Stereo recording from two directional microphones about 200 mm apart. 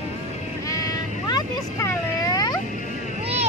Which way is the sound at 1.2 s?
20° left (ahead or behind).